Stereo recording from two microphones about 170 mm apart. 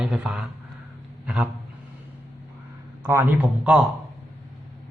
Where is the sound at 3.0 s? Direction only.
15° right (ahead or behind).